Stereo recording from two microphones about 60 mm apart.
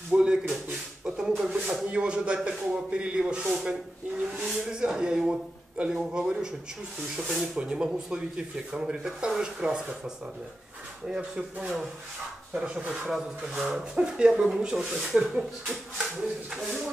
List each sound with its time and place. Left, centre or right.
0.1 s speech: centre
1.0 s a sound: centre
1.9 s speech: centre
7.5 s speech: centre
13.1 s speech: centre
13.9 s speech: centre